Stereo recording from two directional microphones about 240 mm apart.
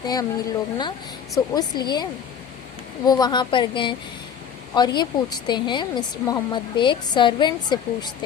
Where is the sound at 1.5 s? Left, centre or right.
Centre.